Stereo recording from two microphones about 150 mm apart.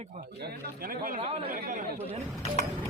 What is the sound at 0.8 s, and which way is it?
Speech, 70° right (ahead or behind).